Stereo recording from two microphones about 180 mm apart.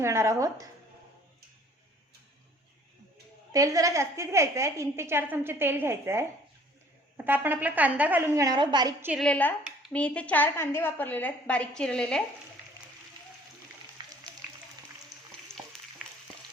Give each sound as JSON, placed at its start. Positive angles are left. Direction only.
{"t": 0.0, "sound": "a woman's voice", "side_deg": -15}
{"t": 3.5, "sound": "a woman's voice", "side_deg": -20}
{"t": 7.3, "sound": "a woman's voice", "side_deg": -10}
{"t": 9.0, "sound": "a woman's voice", "side_deg": -10}
{"t": 9.2, "sound": "speech", "side_deg": 10}
{"t": 14.0, "sound": "a sound", "side_deg": -25}
{"t": 15.5, "sound": "a sound", "side_deg": 5}